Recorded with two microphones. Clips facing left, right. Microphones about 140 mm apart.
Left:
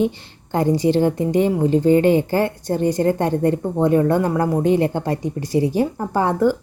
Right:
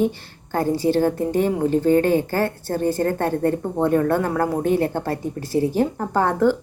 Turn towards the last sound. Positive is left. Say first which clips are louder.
# left 1 dB
turn(degrees=10)  # may be behind; listen again after turning